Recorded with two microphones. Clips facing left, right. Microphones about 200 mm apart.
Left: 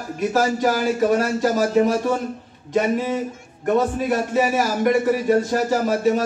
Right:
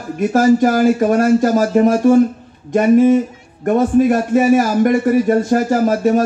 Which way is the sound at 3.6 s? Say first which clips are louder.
Right 7 dB; 50° right (ahead or behind).